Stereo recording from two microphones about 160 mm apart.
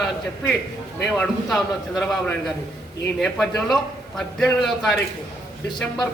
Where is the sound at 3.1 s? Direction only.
Centre (ahead or behind).